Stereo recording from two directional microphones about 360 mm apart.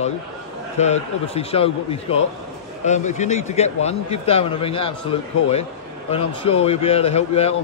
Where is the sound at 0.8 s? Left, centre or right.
Centre.